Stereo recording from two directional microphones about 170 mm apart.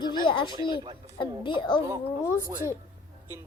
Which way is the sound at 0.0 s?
30° left (ahead or behind).